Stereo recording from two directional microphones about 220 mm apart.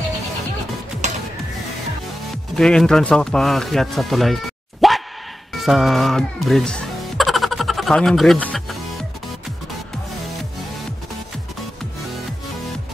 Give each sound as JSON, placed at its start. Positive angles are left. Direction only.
{"t": 1.0, "sound": "music", "side_deg": -30}
{"t": 2.5, "sound": "speech", "side_deg": 0}
{"t": 4.8, "sound": "plop", "side_deg": 0}
{"t": 5.6, "sound": "speech", "side_deg": 0}